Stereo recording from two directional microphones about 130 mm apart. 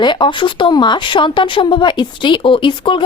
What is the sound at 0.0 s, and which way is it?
Speech, 35° left (ahead or behind).